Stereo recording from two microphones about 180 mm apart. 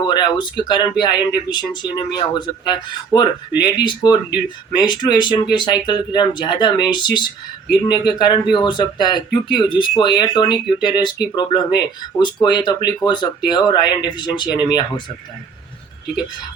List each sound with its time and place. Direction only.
0.0 s speech: 25° left (ahead or behind)